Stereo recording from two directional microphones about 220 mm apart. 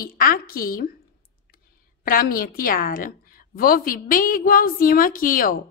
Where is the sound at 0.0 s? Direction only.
40° left (ahead or behind).